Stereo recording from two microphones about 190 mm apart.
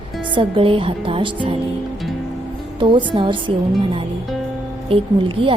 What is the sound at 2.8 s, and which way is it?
Speech, 25° right (ahead or behind).